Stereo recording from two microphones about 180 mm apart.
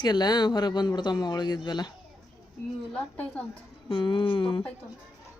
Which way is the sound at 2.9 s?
10° left (ahead or behind).